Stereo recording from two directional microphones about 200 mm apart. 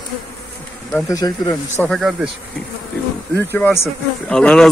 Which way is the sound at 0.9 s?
15° left (ahead or behind).